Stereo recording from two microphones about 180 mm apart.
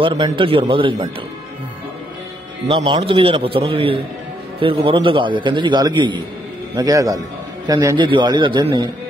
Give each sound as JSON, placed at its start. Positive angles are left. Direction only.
{"t": 0.0, "sound": "a man's voice", "side_deg": -25}
{"t": 2.7, "sound": "a man's voice", "side_deg": -30}